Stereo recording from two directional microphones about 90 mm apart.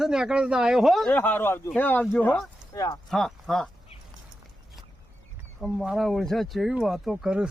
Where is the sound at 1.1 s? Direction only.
20° left (ahead or behind).